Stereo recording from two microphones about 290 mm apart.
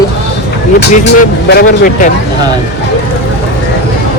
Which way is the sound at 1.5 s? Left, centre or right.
Left.